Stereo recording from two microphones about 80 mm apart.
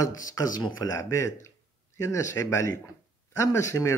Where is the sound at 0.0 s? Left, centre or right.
Left.